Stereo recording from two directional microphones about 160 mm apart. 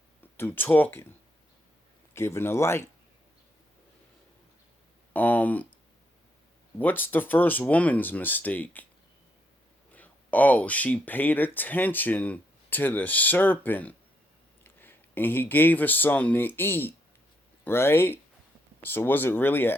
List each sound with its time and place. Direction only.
0.2 s speech: 10° left (ahead or behind)
2.1 s speech: 15° left (ahead or behind)
5.1 s a sound: 10° left (ahead or behind)
6.7 s speech: 10° left (ahead or behind)
9.9 s speech: 10° left (ahead or behind)